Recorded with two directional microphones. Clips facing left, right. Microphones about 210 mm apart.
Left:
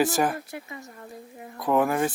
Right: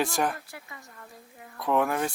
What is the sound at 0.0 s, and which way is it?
Speech, 5° left (ahead or behind).